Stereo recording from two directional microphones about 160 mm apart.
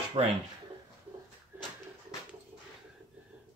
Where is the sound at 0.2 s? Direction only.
35° right (ahead or behind).